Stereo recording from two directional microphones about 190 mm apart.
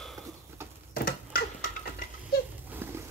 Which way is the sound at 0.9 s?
50° left (ahead or behind).